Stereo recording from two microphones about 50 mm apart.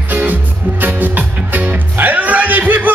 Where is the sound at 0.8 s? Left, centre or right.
Right.